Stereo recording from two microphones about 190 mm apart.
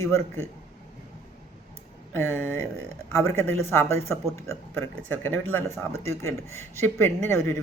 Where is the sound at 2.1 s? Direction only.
10° left (ahead or behind).